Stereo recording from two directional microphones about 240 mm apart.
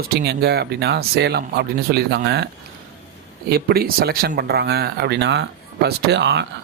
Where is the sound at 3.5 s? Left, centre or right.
Right.